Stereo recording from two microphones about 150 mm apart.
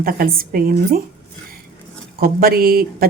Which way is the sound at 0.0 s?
75° right (ahead or behind).